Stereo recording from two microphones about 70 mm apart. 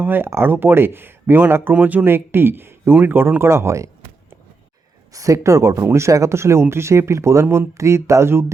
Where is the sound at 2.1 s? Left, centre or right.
Right.